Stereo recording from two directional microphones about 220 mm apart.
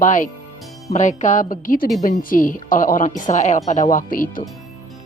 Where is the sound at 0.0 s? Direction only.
35° left (ahead or behind).